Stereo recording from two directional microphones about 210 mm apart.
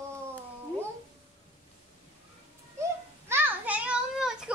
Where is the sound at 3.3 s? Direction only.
10° right (ahead or behind).